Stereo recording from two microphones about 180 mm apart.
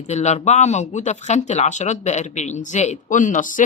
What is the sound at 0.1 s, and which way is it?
A woman's voice, 40° left (ahead or behind).